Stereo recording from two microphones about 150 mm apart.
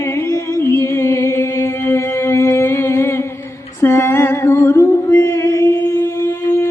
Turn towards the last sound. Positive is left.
turn(degrees=15)  # may be behind; listen again after turning